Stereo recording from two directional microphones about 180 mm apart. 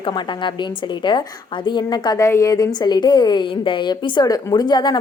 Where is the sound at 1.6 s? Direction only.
25° left (ahead or behind).